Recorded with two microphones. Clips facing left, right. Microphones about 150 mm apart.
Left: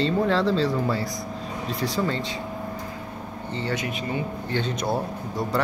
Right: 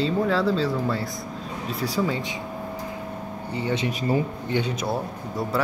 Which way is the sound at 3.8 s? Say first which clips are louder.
Right 5 dB; 35° right (ahead or behind).